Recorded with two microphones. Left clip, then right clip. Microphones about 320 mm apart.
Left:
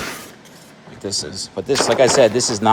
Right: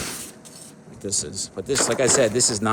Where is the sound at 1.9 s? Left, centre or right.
Centre.